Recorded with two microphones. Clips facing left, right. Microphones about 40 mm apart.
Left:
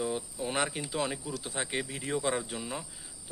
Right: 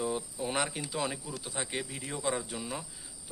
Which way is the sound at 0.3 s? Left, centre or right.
Centre.